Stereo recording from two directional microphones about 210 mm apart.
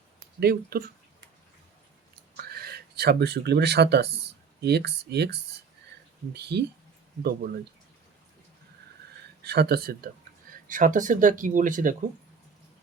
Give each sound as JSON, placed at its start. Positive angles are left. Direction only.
{"t": 0.3, "sound": "speech", "side_deg": -50}
{"t": 2.3, "sound": "speech", "side_deg": -45}
{"t": 9.4, "sound": "speech", "side_deg": -50}